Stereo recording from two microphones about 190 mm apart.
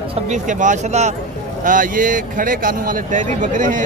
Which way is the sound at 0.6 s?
40° right (ahead or behind).